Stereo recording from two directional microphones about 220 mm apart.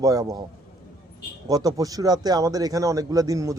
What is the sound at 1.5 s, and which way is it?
A man's voice, 15° right (ahead or behind).